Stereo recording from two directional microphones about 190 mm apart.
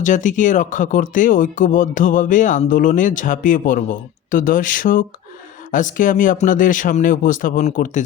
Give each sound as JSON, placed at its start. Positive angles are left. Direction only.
{"t": 0.0, "sound": "speech", "side_deg": 40}